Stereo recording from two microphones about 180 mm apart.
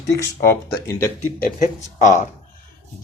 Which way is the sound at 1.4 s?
45° left (ahead or behind).